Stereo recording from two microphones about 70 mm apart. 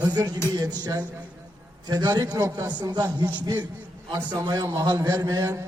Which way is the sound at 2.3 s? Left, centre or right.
Right.